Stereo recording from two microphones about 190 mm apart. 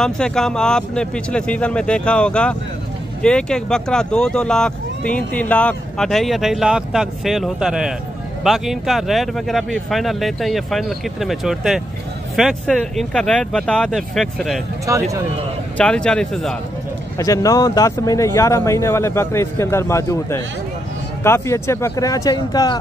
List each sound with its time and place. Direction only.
0.0 s speech: 5° left (ahead or behind)
14.9 s speech: 15° right (ahead or behind)
15.8 s speech: 5° left (ahead or behind)
17.2 s speech: 15° left (ahead or behind)